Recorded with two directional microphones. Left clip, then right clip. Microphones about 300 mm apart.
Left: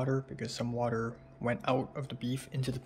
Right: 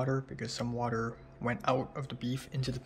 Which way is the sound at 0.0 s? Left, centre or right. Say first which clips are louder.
Even; centre.